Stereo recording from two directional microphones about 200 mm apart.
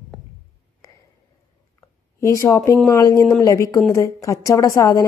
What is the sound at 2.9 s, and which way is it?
A woman's voice, 15° left (ahead or behind).